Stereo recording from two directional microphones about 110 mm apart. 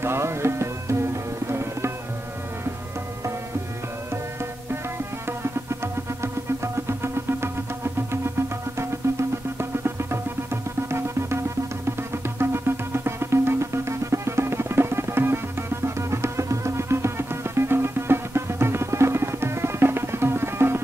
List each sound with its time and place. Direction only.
0.0 s music: 25° right (ahead or behind)
5.2 s music: 25° right (ahead or behind)
9.0 s music: 25° right (ahead or behind)
12.4 s music: 20° right (ahead or behind)